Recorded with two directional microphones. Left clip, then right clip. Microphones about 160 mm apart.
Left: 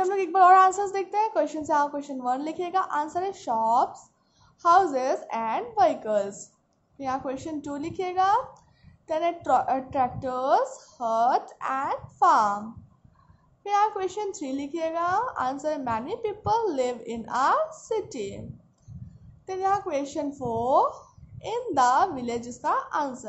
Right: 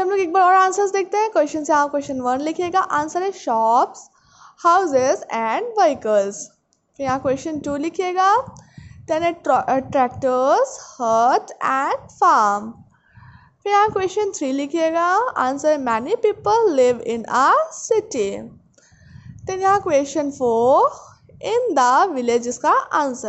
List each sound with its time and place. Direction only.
0.0 s a sound: 35° right (ahead or behind)
1.7 s a woman's voice: 40° right (ahead or behind)
19.4 s a woman's voice: 45° right (ahead or behind)